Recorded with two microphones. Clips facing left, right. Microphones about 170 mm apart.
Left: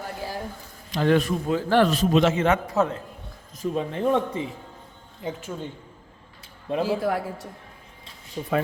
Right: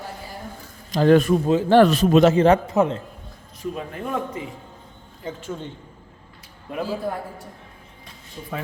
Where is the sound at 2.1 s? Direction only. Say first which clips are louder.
Right 6 dB; 35° right (ahead or behind).